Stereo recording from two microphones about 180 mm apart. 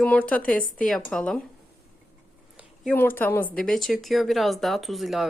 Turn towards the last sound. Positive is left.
turn(degrees=0)  # may be behind; listen again after turning